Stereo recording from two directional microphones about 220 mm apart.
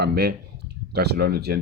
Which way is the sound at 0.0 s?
45° right (ahead or behind).